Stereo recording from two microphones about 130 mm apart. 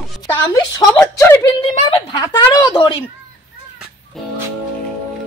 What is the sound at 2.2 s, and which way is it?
Speech, 35° left (ahead or behind).